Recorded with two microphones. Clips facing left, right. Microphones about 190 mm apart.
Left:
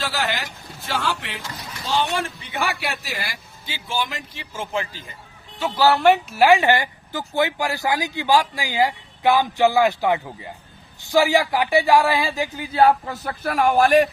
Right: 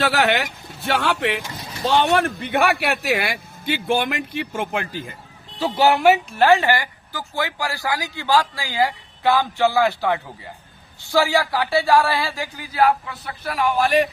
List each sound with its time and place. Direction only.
0.0 s speech: 65° right (ahead or behind)
1.5 s a sound: 30° right (ahead or behind)
1.8 s speech: 60° right (ahead or behind)
5.5 s speech: 30° right (ahead or behind)
6.3 s speech: 10° left (ahead or behind); by 12.9 s 25° left (ahead or behind)
13.2 s a man's voice: 50° left (ahead or behind)